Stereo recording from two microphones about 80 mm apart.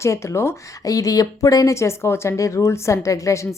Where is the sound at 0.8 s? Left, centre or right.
Left.